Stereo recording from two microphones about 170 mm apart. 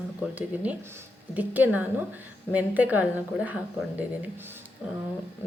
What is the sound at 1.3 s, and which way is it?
A woman's voice, 10° right (ahead or behind).